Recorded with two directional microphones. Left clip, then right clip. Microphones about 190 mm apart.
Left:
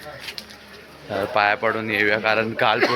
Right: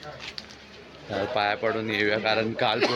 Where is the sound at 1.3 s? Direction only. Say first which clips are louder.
Left 7 dB; centre (ahead or behind).